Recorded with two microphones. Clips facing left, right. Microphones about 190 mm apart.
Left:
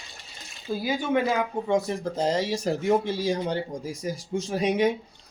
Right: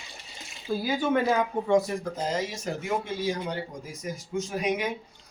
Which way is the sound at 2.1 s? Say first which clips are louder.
Left 5 dB; 30° left (ahead or behind).